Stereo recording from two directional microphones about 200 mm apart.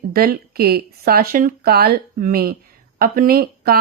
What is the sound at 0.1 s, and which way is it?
Speech, 50° right (ahead or behind).